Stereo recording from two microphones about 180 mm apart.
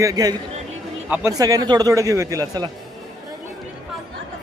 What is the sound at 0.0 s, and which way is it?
A man's voice, 20° right (ahead or behind).